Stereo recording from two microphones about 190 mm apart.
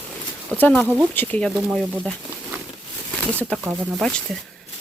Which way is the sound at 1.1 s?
10° left (ahead or behind).